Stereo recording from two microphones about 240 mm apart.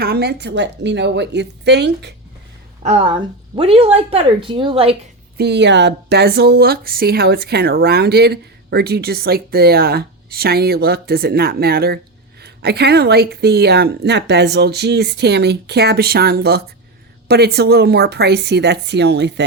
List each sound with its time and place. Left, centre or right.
0.0 s speech: right
2.8 s a woman's voice: right
5.4 s speech: right